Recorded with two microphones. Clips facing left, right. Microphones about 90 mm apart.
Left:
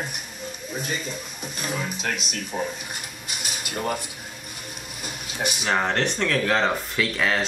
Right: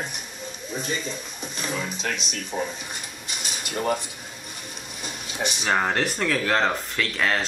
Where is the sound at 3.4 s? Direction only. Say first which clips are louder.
Right 1 dB; 5° left (ahead or behind).